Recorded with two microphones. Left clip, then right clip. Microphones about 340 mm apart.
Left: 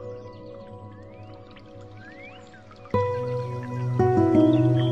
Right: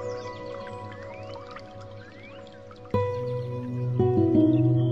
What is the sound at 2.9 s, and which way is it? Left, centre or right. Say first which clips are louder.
Music: left 2 dB; centre.